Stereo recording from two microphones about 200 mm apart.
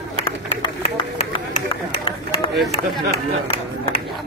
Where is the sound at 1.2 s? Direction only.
30° left (ahead or behind).